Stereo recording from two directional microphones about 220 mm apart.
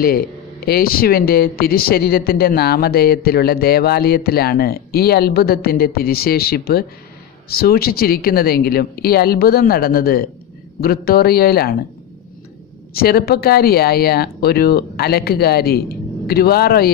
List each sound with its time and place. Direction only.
0.7 s speech: 45° left (ahead or behind)
12.9 s speech: 45° left (ahead or behind)